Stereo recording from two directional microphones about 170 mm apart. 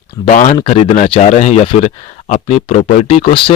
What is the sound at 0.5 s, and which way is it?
Speech, 30° left (ahead or behind).